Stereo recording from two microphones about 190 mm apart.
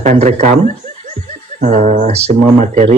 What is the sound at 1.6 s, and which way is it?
Speech, 40° right (ahead or behind).